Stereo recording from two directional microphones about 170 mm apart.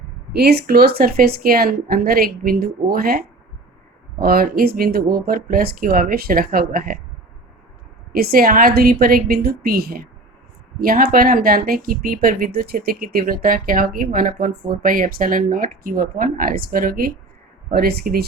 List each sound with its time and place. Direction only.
0.3 s speech: 70° right (ahead or behind)
8.1 s speech: 65° right (ahead or behind)